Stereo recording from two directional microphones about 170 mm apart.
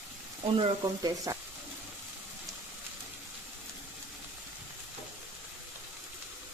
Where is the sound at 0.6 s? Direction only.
20° right (ahead or behind).